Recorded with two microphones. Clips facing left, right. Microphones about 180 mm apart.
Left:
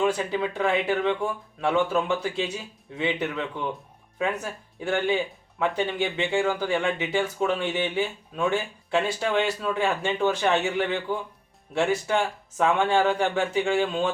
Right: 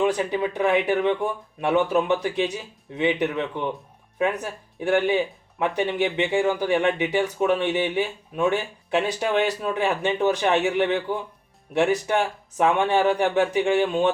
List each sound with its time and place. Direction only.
0.0 s speech: 15° right (ahead or behind)